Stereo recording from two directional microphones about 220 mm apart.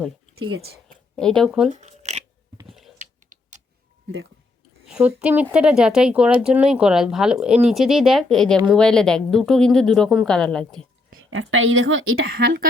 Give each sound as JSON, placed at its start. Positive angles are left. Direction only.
{"t": 1.1, "sound": "speech", "side_deg": 0}
{"t": 1.7, "sound": "a sound", "side_deg": -30}
{"t": 2.6, "sound": "a sound", "side_deg": 0}
{"t": 3.0, "sound": "typing", "side_deg": -35}
{"t": 4.9, "sound": "speech", "side_deg": -5}
{"t": 11.2, "sound": "a woman's voice", "side_deg": -65}